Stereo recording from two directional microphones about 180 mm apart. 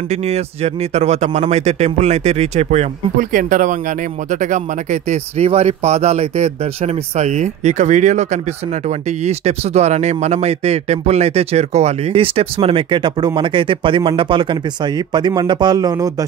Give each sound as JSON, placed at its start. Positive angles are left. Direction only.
{"t": 0.1, "sound": "speech", "side_deg": -35}